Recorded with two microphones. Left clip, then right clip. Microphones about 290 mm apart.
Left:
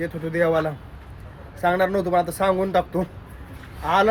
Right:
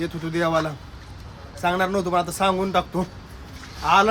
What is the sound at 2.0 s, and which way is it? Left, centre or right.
Speech, centre.